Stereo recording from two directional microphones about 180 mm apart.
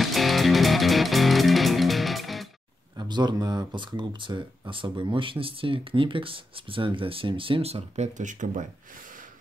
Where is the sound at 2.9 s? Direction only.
25° right (ahead or behind); by 8.6 s 45° right (ahead or behind).